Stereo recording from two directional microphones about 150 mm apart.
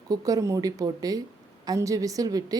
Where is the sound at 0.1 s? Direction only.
25° right (ahead or behind).